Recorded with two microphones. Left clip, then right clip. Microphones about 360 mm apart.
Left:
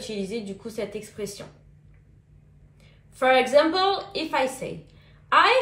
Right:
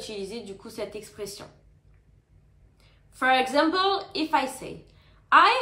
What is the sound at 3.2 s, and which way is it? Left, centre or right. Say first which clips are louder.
A woman's voice: left 3 dB; centre.